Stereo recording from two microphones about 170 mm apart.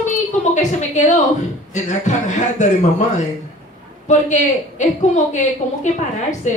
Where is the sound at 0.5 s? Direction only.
45° left (ahead or behind).